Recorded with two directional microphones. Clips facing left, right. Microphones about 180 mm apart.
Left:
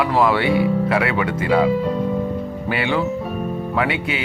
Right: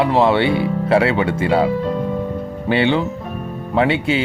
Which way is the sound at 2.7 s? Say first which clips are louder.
Right 4 dB; 30° right (ahead or behind).